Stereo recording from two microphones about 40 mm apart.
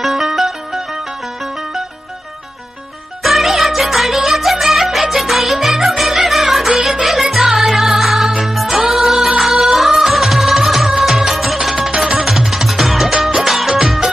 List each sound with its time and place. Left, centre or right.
0.0 s music: centre
3.2 s music: centre
11.9 s music: right
12.3 s music: centre